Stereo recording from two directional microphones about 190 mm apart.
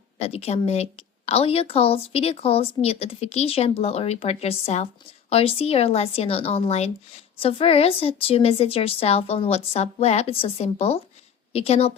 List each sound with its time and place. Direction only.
0.2 s speech: 30° left (ahead or behind)